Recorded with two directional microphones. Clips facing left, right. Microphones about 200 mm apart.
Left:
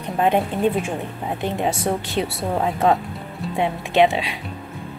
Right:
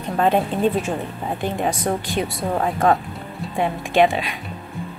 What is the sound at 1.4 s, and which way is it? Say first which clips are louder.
A woman's voice: even; 25° left (ahead or behind).